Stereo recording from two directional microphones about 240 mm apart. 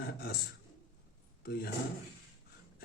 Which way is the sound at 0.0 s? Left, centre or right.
Left.